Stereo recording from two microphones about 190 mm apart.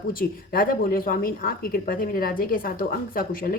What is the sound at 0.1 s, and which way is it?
A woman's voice, 50° left (ahead or behind).